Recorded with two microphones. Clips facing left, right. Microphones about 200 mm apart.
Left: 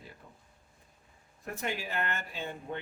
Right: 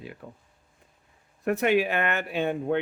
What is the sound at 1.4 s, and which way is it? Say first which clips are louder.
Speech: right 14 dB; 65° right (ahead or behind).